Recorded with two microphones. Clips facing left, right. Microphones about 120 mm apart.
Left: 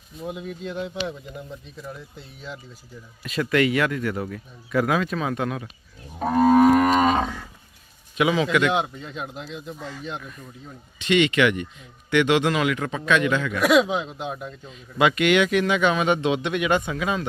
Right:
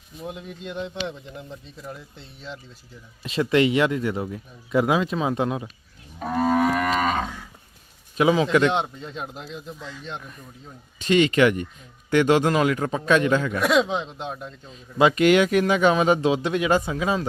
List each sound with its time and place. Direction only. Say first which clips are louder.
0.2 s speech: left 3 dB; centre (ahead or behind)
3.2 s speech: right 2 dB; 25° right (ahead or behind)
6.1 s moo: left 5 dB; 35° left (ahead or behind)
8.1 s a man's voice: right 2 dB; 35° right (ahead or behind)
8.7 s speech: left 1 dB; 5° left (ahead or behind)
9.7 s speech: left 3 dB; 50° left (ahead or behind)
10.1 s speech: even; centre (ahead or behind)
11.0 s speech: right 1 dB; 40° right (ahead or behind)
13.6 s speech: left 2 dB; 5° left (ahead or behind)
14.7 s speech: right 2 dB; 35° right (ahead or behind)